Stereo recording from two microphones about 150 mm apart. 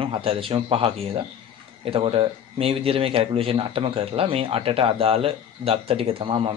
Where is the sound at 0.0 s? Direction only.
40° right (ahead or behind).